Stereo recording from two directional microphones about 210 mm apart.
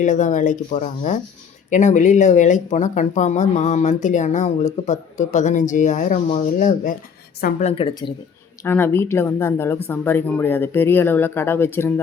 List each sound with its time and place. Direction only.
0.0 s a woman's voice: 35° left (ahead or behind)
8.6 s speech: 10° left (ahead or behind)